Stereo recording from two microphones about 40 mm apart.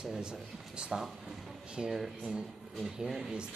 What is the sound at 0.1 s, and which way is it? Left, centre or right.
Speech, right.